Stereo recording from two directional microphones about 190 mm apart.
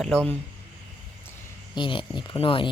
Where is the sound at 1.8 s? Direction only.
25° left (ahead or behind).